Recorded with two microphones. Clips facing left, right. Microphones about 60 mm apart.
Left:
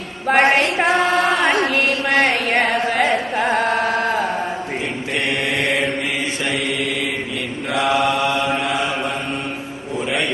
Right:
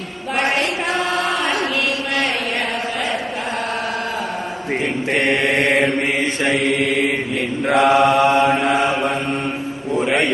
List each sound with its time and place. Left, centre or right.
0.4 s a sound: left
5.1 s mantra: right
6.4 s chant: right
7.7 s mantra: right